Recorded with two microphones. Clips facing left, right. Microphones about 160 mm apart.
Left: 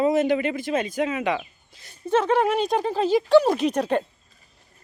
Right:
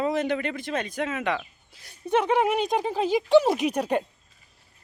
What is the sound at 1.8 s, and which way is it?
Speech, 15° right (ahead or behind).